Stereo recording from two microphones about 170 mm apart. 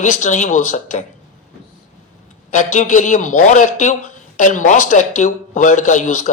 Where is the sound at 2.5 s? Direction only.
50° left (ahead or behind).